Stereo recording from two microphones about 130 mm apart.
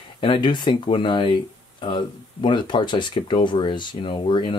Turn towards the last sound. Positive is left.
turn(degrees=40)  # may be behind; listen again after turning